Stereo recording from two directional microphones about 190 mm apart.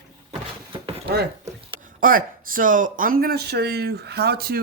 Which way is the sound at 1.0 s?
60° right (ahead or behind).